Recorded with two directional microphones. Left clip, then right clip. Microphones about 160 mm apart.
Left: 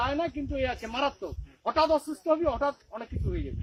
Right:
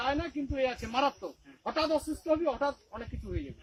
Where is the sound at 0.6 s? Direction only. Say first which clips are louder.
Right 1 dB; 15° right (ahead or behind).